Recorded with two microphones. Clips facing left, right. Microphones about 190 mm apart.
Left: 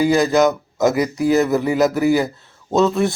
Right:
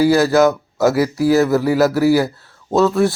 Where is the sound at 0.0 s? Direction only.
5° right (ahead or behind).